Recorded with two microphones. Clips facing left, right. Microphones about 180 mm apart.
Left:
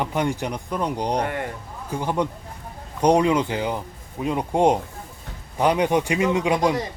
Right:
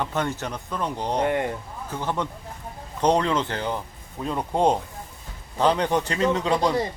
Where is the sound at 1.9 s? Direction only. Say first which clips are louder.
Left 4 dB; 15° left (ahead or behind).